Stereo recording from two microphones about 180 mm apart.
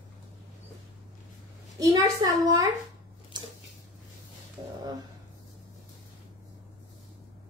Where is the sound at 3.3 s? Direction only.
25° right (ahead or behind).